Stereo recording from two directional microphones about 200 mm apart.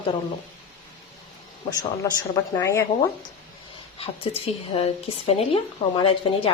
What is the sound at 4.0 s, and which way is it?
Speech, 30° left (ahead or behind).